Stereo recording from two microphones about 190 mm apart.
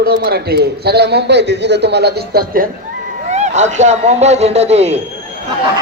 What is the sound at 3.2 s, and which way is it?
A man's voice, 40° right (ahead or behind).